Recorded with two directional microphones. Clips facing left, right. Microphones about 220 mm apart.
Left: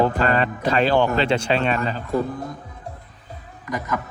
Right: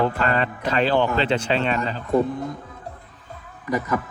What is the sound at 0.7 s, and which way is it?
Speech, 45° left (ahead or behind).